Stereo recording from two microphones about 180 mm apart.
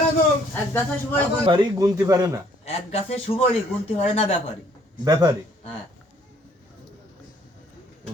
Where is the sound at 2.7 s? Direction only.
35° left (ahead or behind).